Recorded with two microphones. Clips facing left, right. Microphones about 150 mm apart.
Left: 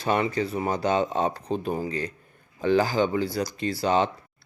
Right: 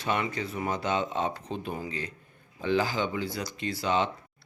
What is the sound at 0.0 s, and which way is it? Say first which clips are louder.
Speech: left 5 dB; 35° left (ahead or behind).